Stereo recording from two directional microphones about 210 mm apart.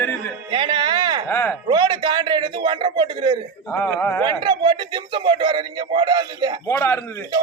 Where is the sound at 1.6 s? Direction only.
20° right (ahead or behind).